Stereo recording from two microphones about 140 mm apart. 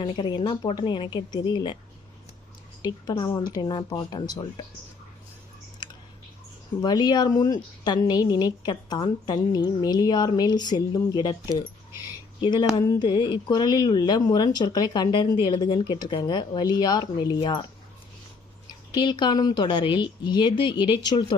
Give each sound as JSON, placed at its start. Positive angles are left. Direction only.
{"t": 0.0, "sound": "speech", "side_deg": 35}
{"t": 2.8, "sound": "a woman's voice", "side_deg": 25}
{"t": 6.8, "sound": "a woman's voice", "side_deg": 30}
{"t": 18.9, "sound": "speech", "side_deg": 30}